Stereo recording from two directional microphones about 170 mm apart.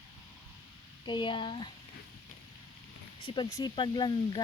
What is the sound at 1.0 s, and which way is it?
Speech, 25° left (ahead or behind).